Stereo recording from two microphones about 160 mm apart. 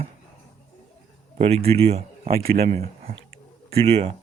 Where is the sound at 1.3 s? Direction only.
40° right (ahead or behind).